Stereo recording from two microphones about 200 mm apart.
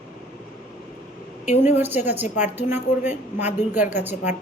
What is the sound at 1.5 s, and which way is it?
Speech, 35° left (ahead or behind).